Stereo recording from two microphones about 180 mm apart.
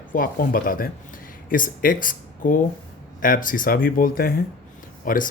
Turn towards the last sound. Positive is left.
turn(degrees=50)  # may be behind; listen again after turning